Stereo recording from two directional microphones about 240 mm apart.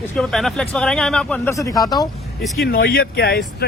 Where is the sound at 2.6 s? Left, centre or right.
Left.